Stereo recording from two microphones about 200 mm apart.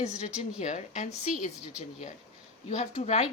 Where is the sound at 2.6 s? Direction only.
35° left (ahead or behind).